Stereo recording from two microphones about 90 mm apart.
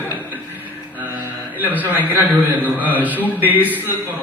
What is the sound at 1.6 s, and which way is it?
A man's voice, 20° right (ahead or behind).